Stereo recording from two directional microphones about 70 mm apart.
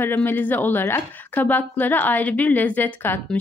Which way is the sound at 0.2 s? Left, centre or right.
Left.